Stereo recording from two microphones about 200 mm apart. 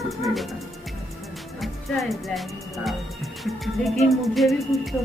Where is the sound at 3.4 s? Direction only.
Centre (ahead or behind).